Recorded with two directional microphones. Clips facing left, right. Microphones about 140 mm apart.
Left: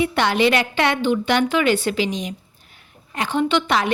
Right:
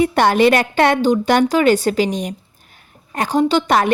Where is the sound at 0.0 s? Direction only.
45° right (ahead or behind).